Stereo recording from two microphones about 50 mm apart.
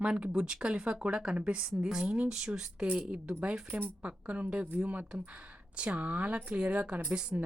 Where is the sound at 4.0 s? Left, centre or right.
Right.